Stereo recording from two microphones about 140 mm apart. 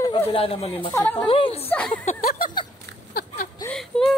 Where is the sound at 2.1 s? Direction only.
85° left.